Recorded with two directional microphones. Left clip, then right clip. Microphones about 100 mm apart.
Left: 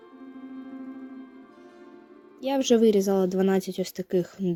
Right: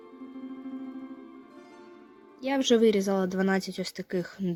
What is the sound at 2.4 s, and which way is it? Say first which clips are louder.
Speech: left 2 dB; 35° left (ahead or behind).